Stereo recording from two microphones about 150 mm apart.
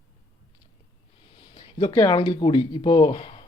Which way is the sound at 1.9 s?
30° left (ahead or behind).